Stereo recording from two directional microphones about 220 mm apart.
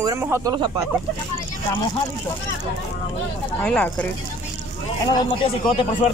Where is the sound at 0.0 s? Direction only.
15° right (ahead or behind).